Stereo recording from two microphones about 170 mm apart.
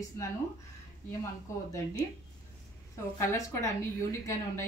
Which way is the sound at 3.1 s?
15° left (ahead or behind).